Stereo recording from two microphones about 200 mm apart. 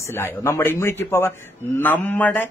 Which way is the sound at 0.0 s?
10° left (ahead or behind).